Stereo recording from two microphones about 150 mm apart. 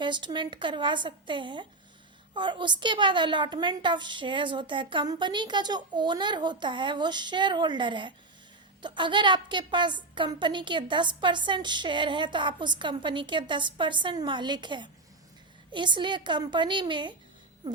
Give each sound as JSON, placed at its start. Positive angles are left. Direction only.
{"t": 0.0, "sound": "a woman's voice", "side_deg": -30}